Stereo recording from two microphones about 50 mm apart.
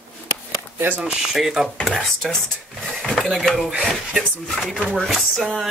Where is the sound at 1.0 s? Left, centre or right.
Centre.